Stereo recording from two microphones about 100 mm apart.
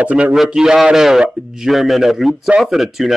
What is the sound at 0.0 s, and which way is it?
A man's voice, 15° right (ahead or behind).